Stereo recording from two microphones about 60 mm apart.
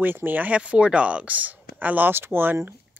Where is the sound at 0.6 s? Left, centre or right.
Centre.